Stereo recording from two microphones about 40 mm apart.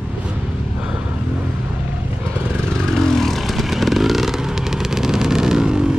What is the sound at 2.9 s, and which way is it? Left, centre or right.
Vehicle, centre.